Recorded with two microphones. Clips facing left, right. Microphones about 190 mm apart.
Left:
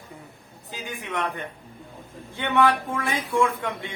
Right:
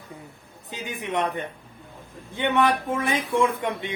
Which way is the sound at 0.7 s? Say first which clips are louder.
Right 3 dB; 20° right (ahead or behind).